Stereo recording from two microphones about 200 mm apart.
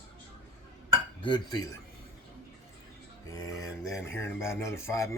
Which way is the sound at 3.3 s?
15° left (ahead or behind).